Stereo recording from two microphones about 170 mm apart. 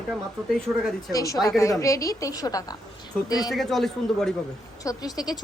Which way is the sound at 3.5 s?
Centre (ahead or behind).